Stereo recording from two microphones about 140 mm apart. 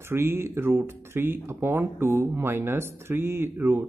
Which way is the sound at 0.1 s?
15° right (ahead or behind).